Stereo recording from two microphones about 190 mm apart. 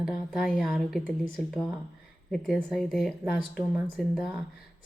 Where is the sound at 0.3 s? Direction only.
Centre (ahead or behind).